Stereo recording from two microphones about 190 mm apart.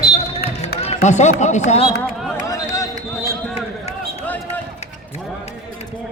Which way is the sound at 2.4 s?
15° left (ahead or behind).